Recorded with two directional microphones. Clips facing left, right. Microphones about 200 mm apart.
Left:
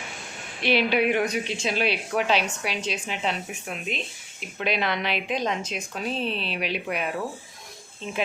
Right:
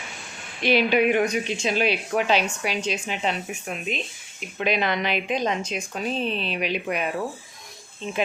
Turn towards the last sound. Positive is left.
turn(degrees=0)  # may be behind; listen again after turning